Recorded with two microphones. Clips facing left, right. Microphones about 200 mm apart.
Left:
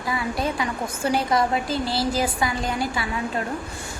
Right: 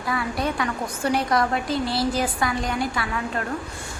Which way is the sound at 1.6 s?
Centre (ahead or behind).